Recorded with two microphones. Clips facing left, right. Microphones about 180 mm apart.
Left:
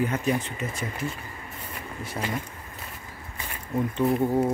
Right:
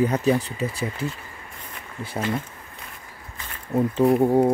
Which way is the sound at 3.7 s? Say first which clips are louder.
Right 5 dB; 35° right (ahead or behind).